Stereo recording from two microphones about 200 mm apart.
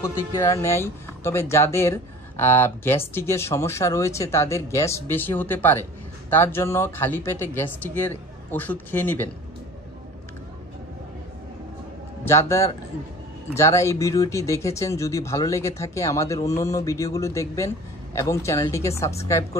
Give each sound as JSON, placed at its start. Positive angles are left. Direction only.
{"t": 0.0, "sound": "speech", "side_deg": 15}
{"t": 12.3, "sound": "speech", "side_deg": 15}